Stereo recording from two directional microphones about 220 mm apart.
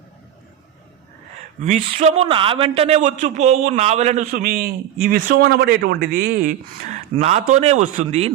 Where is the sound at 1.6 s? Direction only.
30° right (ahead or behind).